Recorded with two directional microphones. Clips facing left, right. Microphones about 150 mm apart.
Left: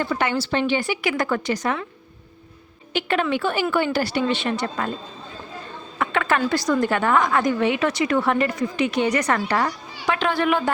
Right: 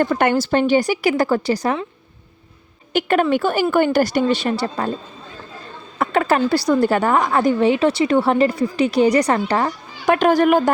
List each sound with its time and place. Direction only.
0.0 s a woman's voice: 50° right (ahead or behind); by 1.8 s 35° right (ahead or behind)
2.9 s a woman's voice: 45° right (ahead or behind)
6.0 s a woman's voice: 35° right (ahead or behind)
10.1 s a woman's voice: 45° right (ahead or behind)